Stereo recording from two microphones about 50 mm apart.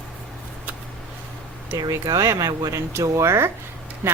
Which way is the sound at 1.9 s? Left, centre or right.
Right.